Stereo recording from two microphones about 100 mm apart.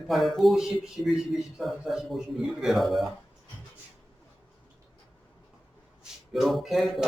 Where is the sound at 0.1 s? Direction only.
Centre (ahead or behind).